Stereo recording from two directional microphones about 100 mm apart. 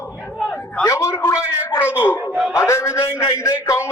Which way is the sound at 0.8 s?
30° left (ahead or behind).